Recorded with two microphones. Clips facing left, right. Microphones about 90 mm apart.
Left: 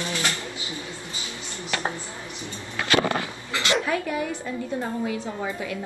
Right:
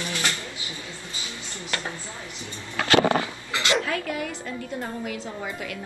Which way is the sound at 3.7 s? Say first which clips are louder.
Left 1 dB; 20° left (ahead or behind).